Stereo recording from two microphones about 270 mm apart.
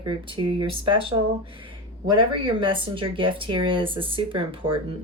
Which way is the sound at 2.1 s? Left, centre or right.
Centre.